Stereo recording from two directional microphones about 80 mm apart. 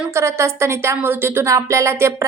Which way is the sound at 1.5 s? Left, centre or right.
Right.